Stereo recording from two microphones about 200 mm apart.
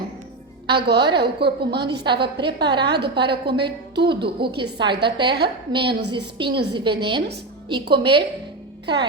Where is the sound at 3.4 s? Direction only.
25° right (ahead or behind).